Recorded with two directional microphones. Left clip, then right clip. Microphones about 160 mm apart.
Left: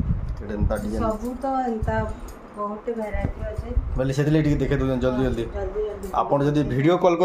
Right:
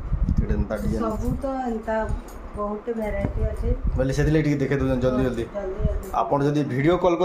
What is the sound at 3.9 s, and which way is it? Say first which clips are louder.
A man's voice: even; 10° left (ahead or behind).